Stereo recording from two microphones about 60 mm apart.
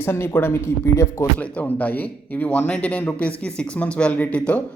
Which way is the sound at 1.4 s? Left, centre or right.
Left.